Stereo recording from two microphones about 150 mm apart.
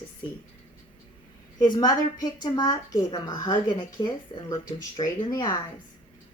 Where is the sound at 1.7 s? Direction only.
25° left (ahead or behind).